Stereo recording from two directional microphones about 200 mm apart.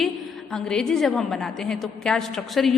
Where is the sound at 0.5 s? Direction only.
5° left (ahead or behind).